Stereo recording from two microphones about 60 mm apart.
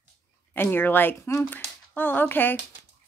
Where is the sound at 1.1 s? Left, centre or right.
Left.